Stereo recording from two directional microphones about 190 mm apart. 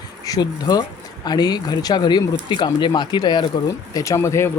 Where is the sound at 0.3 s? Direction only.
20° left (ahead or behind).